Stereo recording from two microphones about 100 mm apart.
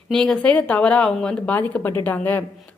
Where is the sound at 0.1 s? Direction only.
5° left (ahead or behind).